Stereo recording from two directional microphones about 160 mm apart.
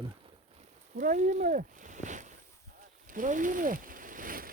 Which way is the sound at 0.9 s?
55° right (ahead or behind).